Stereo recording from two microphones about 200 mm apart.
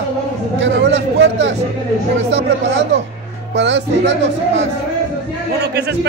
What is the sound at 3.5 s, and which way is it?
A man's voice, 65° right (ahead or behind).